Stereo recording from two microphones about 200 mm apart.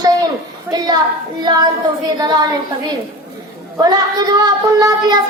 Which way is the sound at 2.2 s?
20° right (ahead or behind).